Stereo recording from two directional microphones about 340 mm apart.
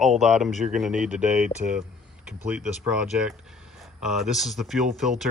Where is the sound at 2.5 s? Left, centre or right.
Centre.